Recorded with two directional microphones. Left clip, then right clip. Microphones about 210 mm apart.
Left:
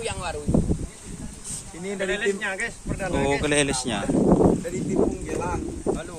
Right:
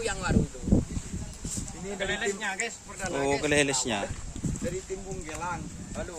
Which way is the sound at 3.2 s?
5° right (ahead or behind).